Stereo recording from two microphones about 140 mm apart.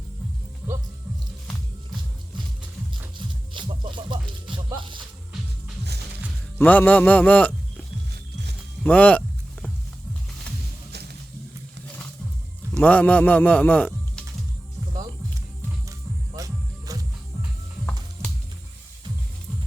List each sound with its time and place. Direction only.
3.2 s music: 35° right (ahead or behind)
6.6 s speech: 10° left (ahead or behind)
8.8 s a sound: 10° left (ahead or behind)
12.7 s speech: 10° left (ahead or behind)
15.9 s music: 25° right (ahead or behind)